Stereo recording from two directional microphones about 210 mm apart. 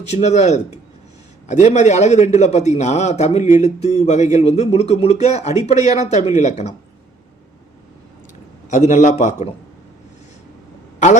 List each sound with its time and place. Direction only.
0.0 s a man's voice: 30° left (ahead or behind)
8.7 s a man's voice: 35° left (ahead or behind)